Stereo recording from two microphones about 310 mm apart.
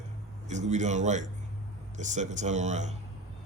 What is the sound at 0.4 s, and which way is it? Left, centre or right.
A man's voice, right.